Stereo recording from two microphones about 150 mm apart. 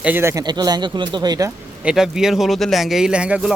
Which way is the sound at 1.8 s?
5° right (ahead or behind).